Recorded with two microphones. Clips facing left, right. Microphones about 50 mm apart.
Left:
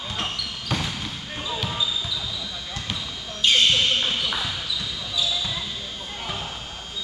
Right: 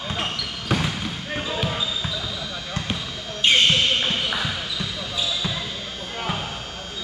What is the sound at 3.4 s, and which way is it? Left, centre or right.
Basketball bounce, right.